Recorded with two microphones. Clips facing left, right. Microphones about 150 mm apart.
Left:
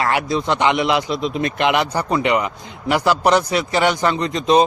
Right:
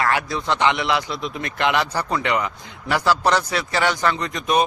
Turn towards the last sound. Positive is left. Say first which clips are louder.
# left 5 dB
turn(degrees=25)  # may be behind; listen again after turning